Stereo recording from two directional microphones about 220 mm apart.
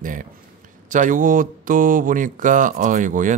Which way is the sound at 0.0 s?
35° right (ahead or behind).